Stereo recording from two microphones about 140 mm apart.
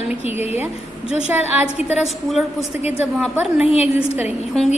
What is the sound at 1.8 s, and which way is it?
A woman's voice, 5° right (ahead or behind).